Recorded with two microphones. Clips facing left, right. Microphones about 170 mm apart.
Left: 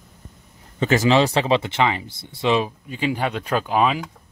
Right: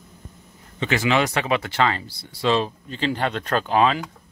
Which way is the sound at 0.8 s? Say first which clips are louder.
Left 4 dB; 40° left (ahead or behind).